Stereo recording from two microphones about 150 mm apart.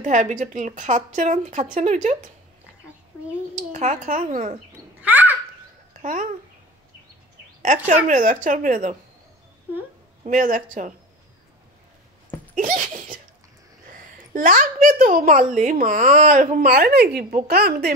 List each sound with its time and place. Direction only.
0.0 s a woman's voice: 55° right (ahead or behind)
3.5 s speech: 50° right (ahead or behind)
5.0 s a sound: 10° right (ahead or behind)
7.6 s a woman's voice: 55° right (ahead or behind)
10.2 s a woman's voice: 60° right (ahead or behind)
12.5 s a sound: 60° right (ahead or behind)
14.3 s speech: 65° right (ahead or behind); by 17.9 s 90° right